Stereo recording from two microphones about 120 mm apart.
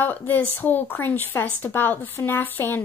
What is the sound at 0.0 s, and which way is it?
A woman's voice, 15° left (ahead or behind).